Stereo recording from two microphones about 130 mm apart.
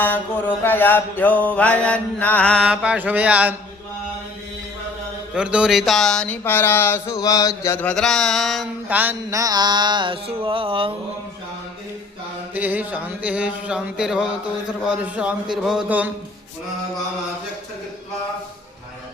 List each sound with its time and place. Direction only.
0.0 s mantra: 15° left (ahead or behind)
2.6 s speech: 10° right (ahead or behind)
5.3 s mantra: 10° right (ahead or behind); by 7.2 s 15° left (ahead or behind)
7.2 s mantra: 30° left (ahead or behind)
7.8 s mantra: 5° left (ahead or behind)
8.9 s speech: 15° right (ahead or behind)
9.3 s music: 30° right (ahead or behind)
12.5 s speech: 15° right (ahead or behind)